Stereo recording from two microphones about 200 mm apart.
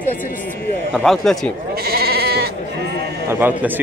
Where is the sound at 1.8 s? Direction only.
50° right (ahead or behind).